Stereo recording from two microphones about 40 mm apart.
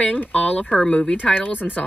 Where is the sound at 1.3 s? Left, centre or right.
Left.